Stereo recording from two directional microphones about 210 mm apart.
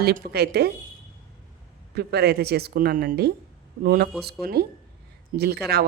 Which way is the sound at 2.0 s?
50° right (ahead or behind).